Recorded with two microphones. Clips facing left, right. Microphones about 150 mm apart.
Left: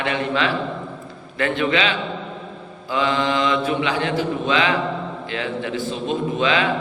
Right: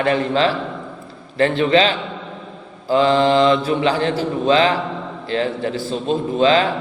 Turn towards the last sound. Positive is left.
turn(degrees=-35)  # may be behind; listen again after turning